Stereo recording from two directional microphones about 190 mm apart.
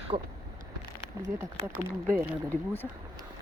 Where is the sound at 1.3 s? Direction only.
10° right (ahead or behind).